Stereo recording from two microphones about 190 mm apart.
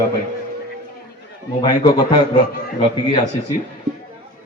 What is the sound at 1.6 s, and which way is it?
Speech, 20° left (ahead or behind).